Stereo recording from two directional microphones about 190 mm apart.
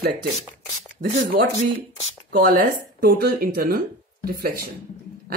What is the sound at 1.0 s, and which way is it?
A woman's voice, 45° right (ahead or behind).